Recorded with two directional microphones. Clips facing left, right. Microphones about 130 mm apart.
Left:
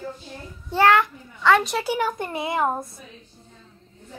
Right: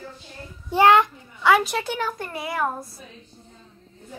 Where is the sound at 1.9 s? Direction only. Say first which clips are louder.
Left 4 dB; 15° left (ahead or behind).